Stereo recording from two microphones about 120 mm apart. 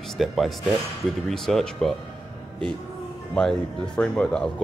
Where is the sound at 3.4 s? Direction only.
5° left (ahead or behind).